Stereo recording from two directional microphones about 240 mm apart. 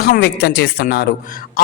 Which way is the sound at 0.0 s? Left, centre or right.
Left.